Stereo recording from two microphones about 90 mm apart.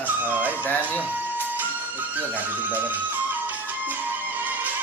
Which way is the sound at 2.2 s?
20° right (ahead or behind).